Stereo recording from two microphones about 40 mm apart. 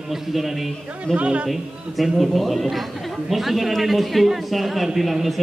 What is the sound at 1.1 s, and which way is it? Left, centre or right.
Speech, right.